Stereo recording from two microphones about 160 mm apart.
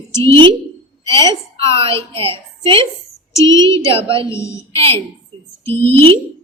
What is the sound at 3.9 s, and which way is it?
Speech, 35° right (ahead or behind).